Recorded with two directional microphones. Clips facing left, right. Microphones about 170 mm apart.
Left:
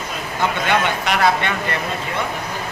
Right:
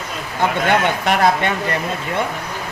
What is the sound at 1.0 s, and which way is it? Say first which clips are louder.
Speech: right 2 dB; 45° right (ahead or behind).